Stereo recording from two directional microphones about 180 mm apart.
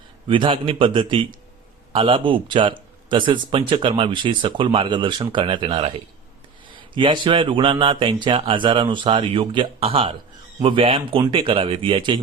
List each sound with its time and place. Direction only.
0.3 s speech: 30° right (ahead or behind)